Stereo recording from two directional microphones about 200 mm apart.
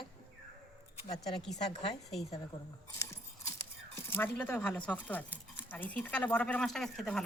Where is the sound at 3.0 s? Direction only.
15° left (ahead or behind).